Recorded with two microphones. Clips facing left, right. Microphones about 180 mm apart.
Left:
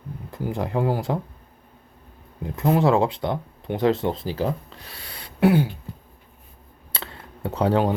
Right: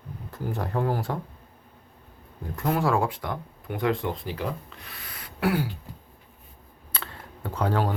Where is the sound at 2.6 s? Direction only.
20° left (ahead or behind).